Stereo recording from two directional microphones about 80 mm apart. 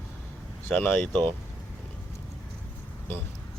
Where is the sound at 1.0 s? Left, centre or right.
Centre.